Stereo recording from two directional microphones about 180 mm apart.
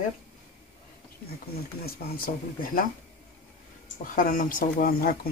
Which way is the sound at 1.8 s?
50° left (ahead or behind).